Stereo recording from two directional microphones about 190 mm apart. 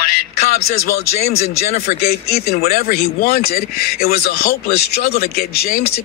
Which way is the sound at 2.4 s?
50° left (ahead or behind).